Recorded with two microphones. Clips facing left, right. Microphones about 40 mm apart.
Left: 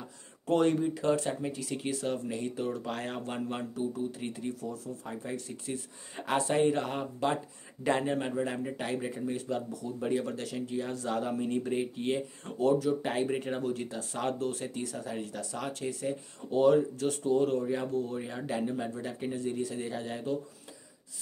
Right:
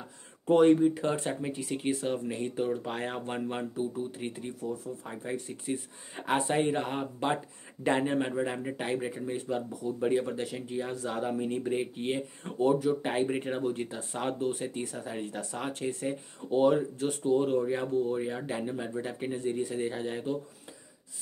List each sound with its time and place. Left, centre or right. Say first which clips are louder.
0.5 s speech: right 5 dB; centre